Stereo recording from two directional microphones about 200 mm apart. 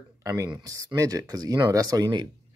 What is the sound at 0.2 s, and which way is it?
Speech, 15° right (ahead or behind).